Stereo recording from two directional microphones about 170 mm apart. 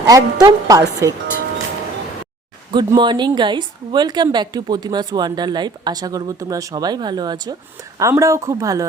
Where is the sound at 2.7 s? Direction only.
25° right (ahead or behind).